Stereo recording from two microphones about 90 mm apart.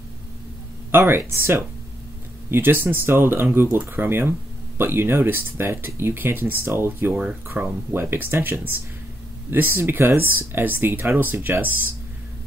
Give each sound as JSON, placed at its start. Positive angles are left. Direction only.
{"t": 0.9, "sound": "speech", "side_deg": -25}